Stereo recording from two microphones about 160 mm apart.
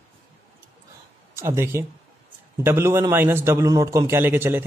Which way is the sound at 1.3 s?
15° right (ahead or behind).